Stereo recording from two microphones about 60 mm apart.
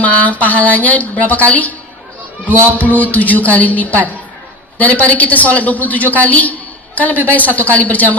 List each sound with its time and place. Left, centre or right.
0.0 s a woman's voice: left
2.7 s a woman's voice: left